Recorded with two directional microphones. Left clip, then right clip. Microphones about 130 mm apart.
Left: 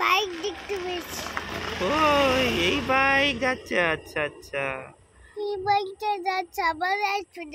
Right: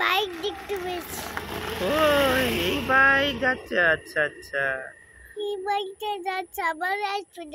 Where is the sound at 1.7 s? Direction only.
10° right (ahead or behind).